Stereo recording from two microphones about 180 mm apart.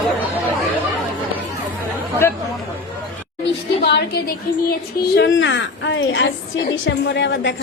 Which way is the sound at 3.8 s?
70° left (ahead or behind).